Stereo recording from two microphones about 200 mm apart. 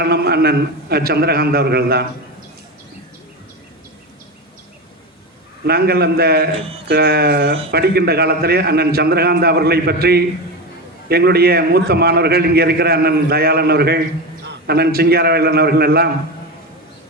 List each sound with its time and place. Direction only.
0.0 s a man's voice: 50° right (ahead or behind)
5.6 s a man's voice: 50° right (ahead or behind)